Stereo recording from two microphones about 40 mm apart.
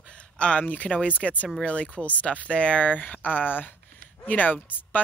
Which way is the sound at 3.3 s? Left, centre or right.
Left.